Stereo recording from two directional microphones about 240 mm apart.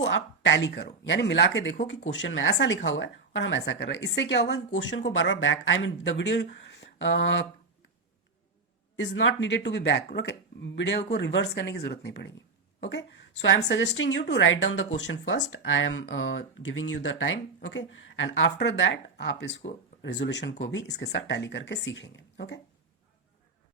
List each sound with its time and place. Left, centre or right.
0.0 s a woman's voice: left
9.0 s a woman's voice: left